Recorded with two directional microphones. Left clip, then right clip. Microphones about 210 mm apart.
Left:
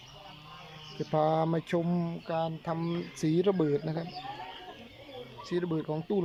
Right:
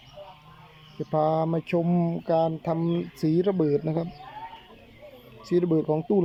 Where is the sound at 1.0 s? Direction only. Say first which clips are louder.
Right 3 dB; centre (ahead or behind).